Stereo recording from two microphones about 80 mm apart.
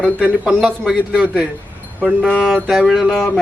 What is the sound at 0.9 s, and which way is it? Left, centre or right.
Speech, centre.